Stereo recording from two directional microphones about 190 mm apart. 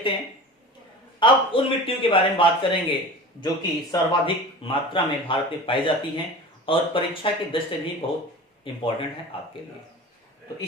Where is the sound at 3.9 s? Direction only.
25° left (ahead or behind).